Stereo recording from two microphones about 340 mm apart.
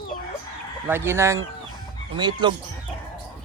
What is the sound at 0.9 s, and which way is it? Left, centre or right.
Speech, centre.